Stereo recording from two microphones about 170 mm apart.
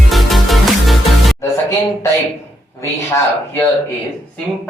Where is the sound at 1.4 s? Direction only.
15° left (ahead or behind).